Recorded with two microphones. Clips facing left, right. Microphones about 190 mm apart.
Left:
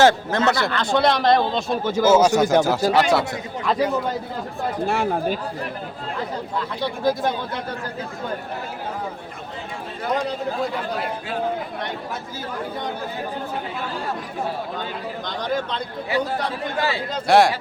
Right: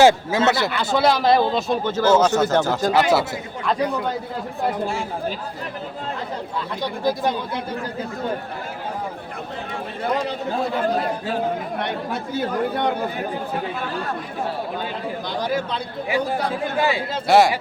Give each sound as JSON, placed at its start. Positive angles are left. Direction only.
{"t": 0.0, "sound": "speech", "side_deg": -10}
{"t": 1.9, "sound": "a man's voice", "side_deg": 10}
{"t": 4.9, "sound": "speech", "side_deg": 65}
{"t": 11.8, "sound": "speech", "side_deg": -65}
{"t": 15.4, "sound": "speech", "side_deg": -10}
{"t": 17.2, "sound": "speech", "side_deg": 0}